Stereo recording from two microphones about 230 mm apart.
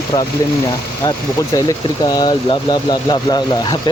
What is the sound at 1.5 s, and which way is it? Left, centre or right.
Speech, centre.